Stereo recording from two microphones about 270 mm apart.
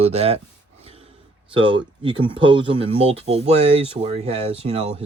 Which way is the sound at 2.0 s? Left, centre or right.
Centre.